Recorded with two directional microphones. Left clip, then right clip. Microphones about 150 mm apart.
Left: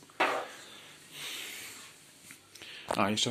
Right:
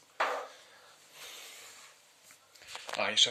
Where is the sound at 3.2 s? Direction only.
15° left (ahead or behind).